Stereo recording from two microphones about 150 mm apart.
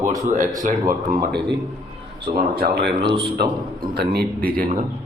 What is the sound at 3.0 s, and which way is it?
Speech, 35° right (ahead or behind).